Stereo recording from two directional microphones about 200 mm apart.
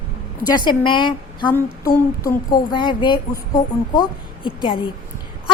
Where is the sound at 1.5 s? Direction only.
10° left (ahead or behind).